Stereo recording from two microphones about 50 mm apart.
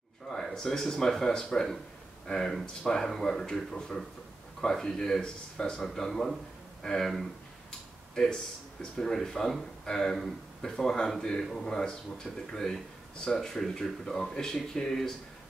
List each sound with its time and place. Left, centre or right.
0.3 s speech: centre